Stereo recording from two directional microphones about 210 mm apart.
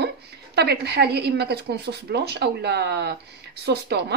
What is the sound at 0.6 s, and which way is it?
Speech, 50° right (ahead or behind).